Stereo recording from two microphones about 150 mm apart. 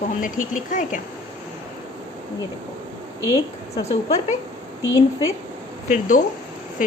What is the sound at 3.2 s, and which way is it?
Speech, 20° right (ahead or behind).